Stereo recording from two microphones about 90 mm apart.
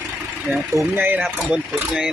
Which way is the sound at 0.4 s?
Centre (ahead or behind).